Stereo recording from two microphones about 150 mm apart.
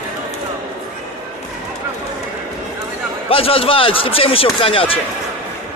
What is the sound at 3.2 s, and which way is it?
A man's voice, 40° left (ahead or behind).